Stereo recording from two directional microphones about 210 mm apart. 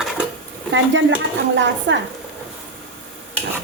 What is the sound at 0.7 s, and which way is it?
Speech, 60° right (ahead or behind).